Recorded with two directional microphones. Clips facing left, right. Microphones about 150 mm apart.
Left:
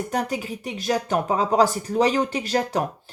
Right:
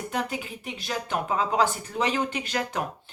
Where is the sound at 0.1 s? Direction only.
40° left (ahead or behind).